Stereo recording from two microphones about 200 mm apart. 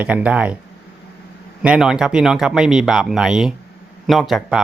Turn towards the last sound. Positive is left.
turn(degrees=0)  # may be behind; listen again after turning